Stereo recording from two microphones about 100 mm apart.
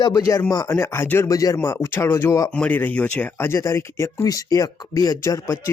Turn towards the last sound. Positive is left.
turn(degrees=25)  # may be behind; listen again after turning